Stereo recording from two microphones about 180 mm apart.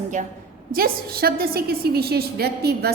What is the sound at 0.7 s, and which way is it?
A woman's voice, 55° right (ahead or behind).